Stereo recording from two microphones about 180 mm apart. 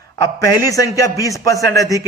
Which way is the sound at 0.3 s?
20° left (ahead or behind).